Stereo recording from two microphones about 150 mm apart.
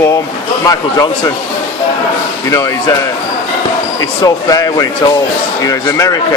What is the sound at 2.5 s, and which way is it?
Speech, 25° left (ahead or behind).